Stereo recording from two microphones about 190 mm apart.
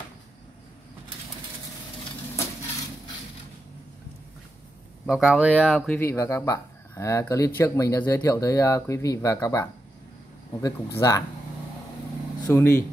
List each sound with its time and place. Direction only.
5.0 s speech: centre (ahead or behind)
5.9 s speech: 15° left (ahead or behind)
12.4 s speech: 10° left (ahead or behind)